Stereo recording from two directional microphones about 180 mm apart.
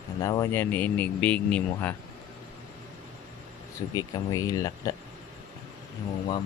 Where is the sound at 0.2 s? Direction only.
20° left (ahead or behind).